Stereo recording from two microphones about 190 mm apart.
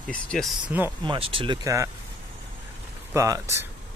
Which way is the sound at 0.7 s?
10° right (ahead or behind).